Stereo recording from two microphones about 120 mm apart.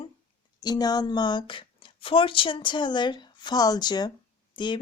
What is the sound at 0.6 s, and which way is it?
Speech, 35° left (ahead or behind).